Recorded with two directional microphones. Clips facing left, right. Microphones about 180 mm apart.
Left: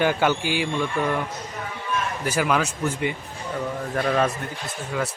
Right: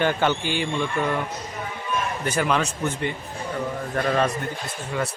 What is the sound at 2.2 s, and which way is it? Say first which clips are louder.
Speech: left 1 dB; 5° left (ahead or behind).